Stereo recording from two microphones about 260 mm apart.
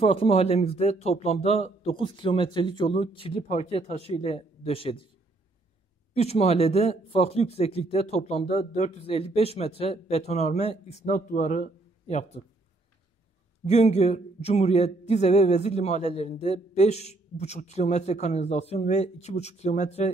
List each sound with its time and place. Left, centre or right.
0.0 s a man's voice: left
6.1 s a man's voice: left
13.7 s a man's voice: left